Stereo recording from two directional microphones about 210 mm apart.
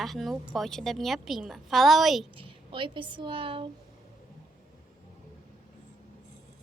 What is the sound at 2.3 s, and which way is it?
Speech, 25° right (ahead or behind).